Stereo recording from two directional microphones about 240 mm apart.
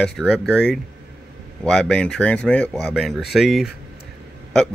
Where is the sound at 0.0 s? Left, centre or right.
Centre.